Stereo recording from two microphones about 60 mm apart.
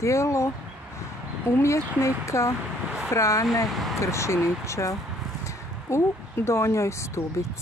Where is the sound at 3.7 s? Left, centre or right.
Centre.